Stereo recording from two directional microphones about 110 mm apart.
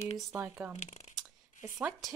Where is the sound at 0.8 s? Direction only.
85° left.